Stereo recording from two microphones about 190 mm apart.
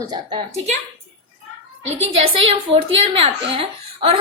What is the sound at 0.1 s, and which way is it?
Speech, 30° right (ahead or behind).